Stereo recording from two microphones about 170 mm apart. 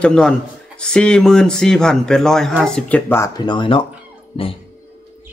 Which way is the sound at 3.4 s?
30° left (ahead or behind).